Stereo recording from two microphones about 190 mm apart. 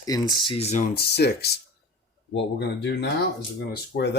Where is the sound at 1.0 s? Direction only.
60° left (ahead or behind).